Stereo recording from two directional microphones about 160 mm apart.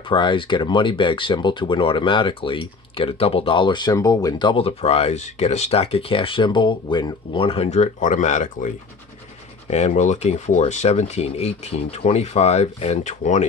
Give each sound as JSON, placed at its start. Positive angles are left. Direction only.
{"t": 0.1, "sound": "speech", "side_deg": 30}